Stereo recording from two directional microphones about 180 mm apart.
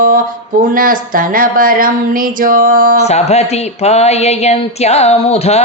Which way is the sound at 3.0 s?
35° left (ahead or behind).